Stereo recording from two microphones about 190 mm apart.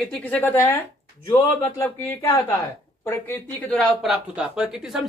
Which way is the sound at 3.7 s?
Centre (ahead or behind).